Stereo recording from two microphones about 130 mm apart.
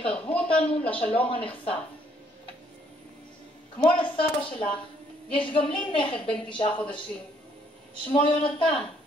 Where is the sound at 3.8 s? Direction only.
40° left (ahead or behind).